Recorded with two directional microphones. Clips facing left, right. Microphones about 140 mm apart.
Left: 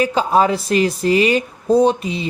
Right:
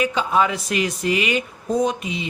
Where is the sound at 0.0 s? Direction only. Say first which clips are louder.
Left 4 dB; 35° left (ahead or behind).